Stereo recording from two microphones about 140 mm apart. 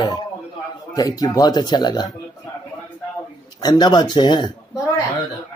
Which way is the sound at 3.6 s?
30° left (ahead or behind).